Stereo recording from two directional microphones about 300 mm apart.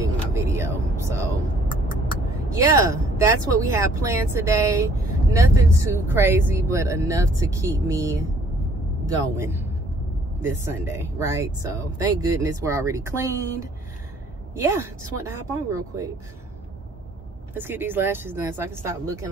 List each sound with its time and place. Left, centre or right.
0.0 s vehicle: centre
2.5 s speech: centre
15.2 s speech: centre
17.6 s speech: centre